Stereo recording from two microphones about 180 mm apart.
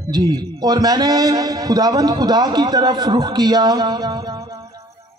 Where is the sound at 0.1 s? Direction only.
20° right (ahead or behind).